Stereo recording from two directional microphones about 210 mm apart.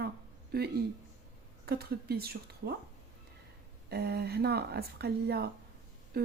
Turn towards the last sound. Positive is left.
turn(degrees=-45)  # may be behind; listen again after turning